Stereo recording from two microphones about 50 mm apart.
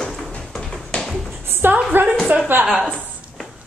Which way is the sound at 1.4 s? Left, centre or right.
Right.